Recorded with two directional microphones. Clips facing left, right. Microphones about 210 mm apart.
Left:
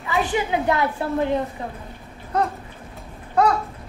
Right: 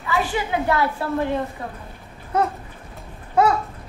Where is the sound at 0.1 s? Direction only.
20° left (ahead or behind).